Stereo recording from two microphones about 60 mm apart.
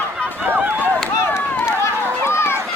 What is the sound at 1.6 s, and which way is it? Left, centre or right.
Run, left.